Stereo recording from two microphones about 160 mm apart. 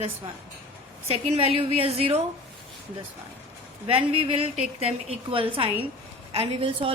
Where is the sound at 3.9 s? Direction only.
35° right (ahead or behind).